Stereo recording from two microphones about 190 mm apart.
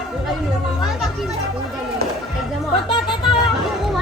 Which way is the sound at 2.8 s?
25° left (ahead or behind).